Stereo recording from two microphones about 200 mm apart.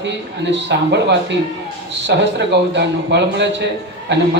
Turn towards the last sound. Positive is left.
turn(degrees=-60)  # may be behind; listen again after turning